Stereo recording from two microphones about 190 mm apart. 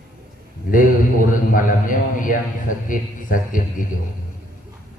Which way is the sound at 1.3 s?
45° left (ahead or behind).